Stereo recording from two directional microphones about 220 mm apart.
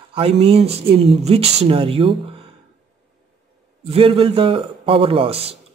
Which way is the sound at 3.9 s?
25° right (ahead or behind).